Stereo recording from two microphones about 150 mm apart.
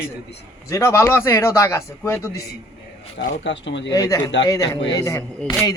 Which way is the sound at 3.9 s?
25° left (ahead or behind).